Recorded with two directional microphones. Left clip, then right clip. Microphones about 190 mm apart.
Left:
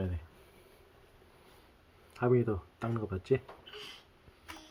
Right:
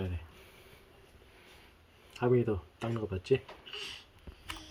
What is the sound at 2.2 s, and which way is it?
Speech, 5° left (ahead or behind).